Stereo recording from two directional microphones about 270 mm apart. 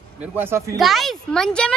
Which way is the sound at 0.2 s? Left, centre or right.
Centre.